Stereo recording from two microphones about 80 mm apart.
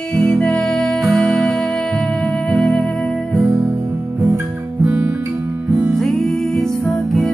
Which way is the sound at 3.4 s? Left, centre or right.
Right.